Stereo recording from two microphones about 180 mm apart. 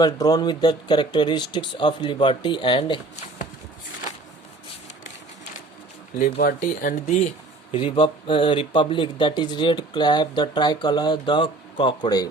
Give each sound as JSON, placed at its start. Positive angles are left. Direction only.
{"t": 0.0, "sound": "speech", "side_deg": 20}
{"t": 6.1, "sound": "speech", "side_deg": 45}
{"t": 7.0, "sound": "speech", "side_deg": 35}